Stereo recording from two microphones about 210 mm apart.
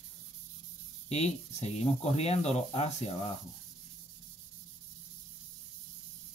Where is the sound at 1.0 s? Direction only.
30° left (ahead or behind).